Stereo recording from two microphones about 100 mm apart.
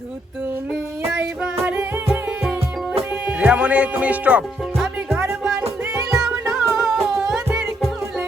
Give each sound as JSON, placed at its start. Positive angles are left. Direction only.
{"t": 2.0, "sound": "music", "side_deg": 0}
{"t": 3.2, "sound": "speech", "side_deg": -10}
{"t": 5.0, "sound": "music", "side_deg": -25}
{"t": 6.4, "sound": "music", "side_deg": 0}